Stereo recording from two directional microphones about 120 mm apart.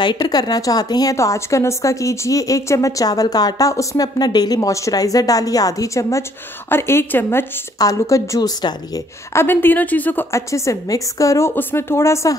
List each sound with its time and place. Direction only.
0.0 s a woman's voice: 35° left (ahead or behind)
9.3 s a woman's voice: 20° left (ahead or behind)